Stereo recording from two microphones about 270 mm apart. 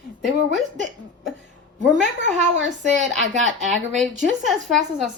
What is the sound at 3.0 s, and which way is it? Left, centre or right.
Speech, right.